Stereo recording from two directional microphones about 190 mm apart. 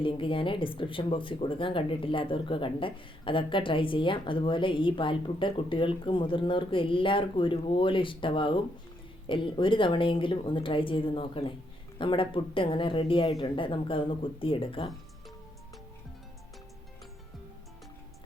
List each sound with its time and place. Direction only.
0.0 s speech: 25° left (ahead or behind)